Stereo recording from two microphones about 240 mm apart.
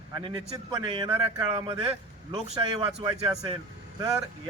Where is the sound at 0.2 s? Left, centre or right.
Right.